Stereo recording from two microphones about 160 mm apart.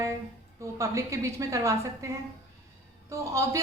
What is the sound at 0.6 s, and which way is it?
A woman's voice, 20° right (ahead or behind).